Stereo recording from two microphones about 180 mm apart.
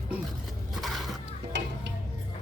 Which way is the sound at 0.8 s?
Centre (ahead or behind).